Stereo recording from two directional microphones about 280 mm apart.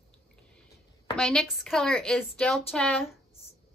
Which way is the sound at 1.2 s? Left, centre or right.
Centre.